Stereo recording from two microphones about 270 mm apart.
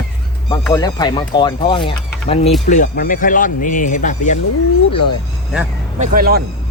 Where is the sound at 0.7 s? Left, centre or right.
Centre.